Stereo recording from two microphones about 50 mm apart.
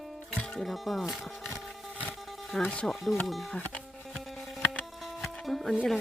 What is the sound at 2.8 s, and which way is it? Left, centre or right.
Speech, centre.